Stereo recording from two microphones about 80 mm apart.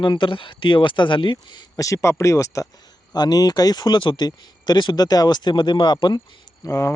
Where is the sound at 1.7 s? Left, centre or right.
Left.